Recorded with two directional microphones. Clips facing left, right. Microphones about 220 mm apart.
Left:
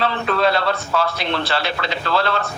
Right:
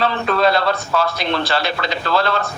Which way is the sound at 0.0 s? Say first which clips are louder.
Right 2 dB; 40° right (ahead or behind).